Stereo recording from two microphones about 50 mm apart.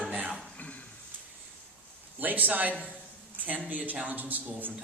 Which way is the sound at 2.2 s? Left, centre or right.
Right.